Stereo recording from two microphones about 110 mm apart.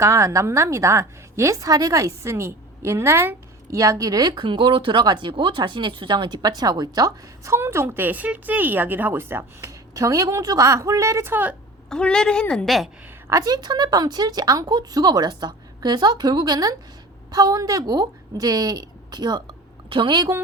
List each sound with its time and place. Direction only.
0.0 s a woman's voice: 25° right (ahead or behind)
11.9 s a woman's voice: 10° left (ahead or behind)
13.2 s a woman's voice: 30° right (ahead or behind); by 20.2 s 50° right (ahead or behind)